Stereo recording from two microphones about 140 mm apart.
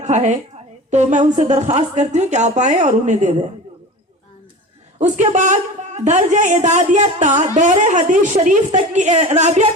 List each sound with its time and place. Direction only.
0.0 s a woman's voice: 60° right (ahead or behind)
4.9 s a woman's voice: 60° right (ahead or behind)